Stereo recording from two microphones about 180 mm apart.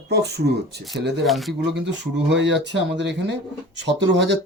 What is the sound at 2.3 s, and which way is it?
Speech, 75° right (ahead or behind).